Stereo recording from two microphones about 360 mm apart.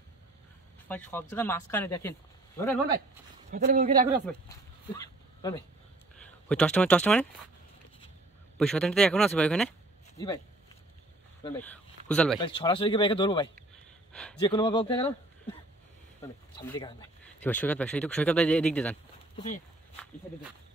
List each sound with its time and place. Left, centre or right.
0.8 s speech: centre
3.4 s speech: right
4.3 s a sound: centre
6.5 s speech: centre
8.5 s speech: centre
11.4 s speech: centre
12.4 s speech: centre
16.2 s speech: centre